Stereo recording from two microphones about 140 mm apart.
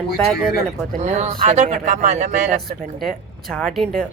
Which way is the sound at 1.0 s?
55° right (ahead or behind).